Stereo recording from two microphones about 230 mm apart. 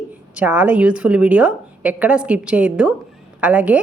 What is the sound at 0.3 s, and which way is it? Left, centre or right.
A woman's voice, centre.